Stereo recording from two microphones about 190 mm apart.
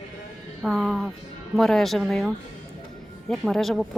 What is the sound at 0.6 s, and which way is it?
Speech, centre (ahead or behind).